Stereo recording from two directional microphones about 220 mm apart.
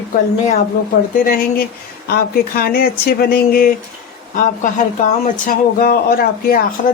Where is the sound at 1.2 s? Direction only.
40° left (ahead or behind).